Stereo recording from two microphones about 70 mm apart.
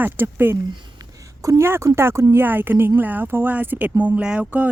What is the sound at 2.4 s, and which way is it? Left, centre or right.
Speech, right.